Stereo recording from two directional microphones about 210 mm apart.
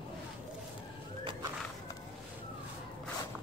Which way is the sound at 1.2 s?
20° right (ahead or behind).